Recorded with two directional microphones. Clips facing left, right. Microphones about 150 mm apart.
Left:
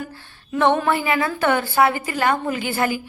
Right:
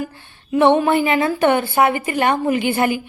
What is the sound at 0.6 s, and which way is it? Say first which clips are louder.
A woman's voice: right 4 dB; 15° right (ahead or behind).